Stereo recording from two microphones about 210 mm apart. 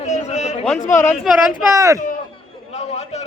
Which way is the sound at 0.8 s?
35° left (ahead or behind).